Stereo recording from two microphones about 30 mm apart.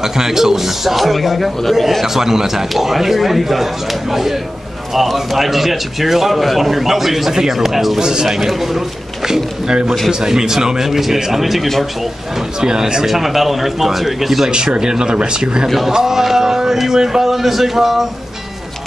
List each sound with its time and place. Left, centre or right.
0.0 s speech: centre
2.0 s speech: centre
8.0 s speech: right
8.3 s speech: centre
10.9 s speech: centre
12.5 s speech: right
13.0 s speech: centre
14.8 s speech: right
15.9 s speech: centre